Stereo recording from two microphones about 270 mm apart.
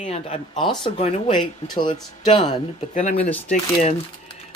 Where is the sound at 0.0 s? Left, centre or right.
Left.